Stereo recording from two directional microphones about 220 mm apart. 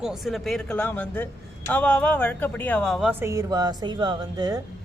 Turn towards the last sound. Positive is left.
turn(degrees=-15)  # may be behind; listen again after turning